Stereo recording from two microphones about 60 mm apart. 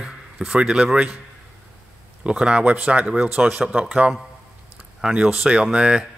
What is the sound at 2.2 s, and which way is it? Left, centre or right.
Speech, centre.